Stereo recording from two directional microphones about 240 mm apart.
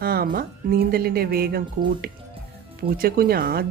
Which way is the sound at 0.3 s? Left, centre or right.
Right.